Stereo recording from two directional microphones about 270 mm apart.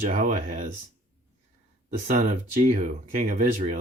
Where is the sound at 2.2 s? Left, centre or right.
Right.